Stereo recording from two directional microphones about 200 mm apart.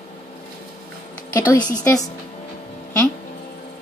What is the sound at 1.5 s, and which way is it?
Speech, 20° left (ahead or behind).